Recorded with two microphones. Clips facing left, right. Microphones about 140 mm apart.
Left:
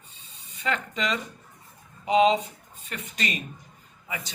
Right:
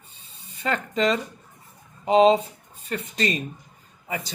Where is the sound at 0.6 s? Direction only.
40° right (ahead or behind).